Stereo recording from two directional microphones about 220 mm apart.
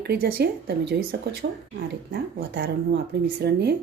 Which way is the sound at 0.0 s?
45° right (ahead or behind).